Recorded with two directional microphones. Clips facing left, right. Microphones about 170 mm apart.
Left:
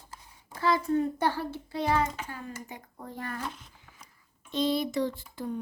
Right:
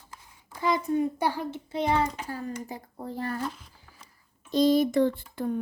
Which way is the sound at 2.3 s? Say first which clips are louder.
Right 6 dB; 35° right (ahead or behind).